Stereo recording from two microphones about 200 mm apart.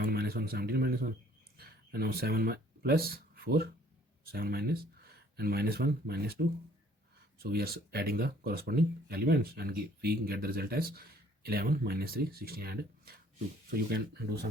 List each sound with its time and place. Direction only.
0.0 s speech: 50° right (ahead or behind)
7.3 s speech: 50° right (ahead or behind)